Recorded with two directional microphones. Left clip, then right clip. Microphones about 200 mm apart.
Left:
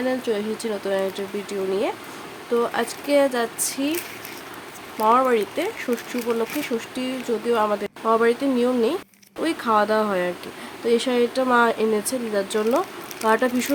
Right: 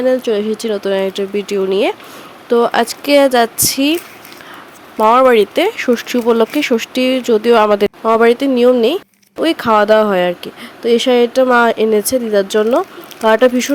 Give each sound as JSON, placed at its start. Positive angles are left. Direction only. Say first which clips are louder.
{"t": 0.0, "sound": "a woman's voice", "louder": "right 10 dB", "side_deg": -35}
{"t": 4.9, "sound": "a woman's voice", "louder": "right 10 dB", "side_deg": -40}
{"t": 8.0, "sound": "speech", "louder": "right 7 dB", "side_deg": -35}